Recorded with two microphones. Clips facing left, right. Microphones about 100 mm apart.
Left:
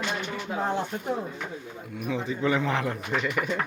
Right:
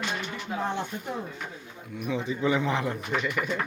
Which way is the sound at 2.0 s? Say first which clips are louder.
Even; centre (ahead or behind).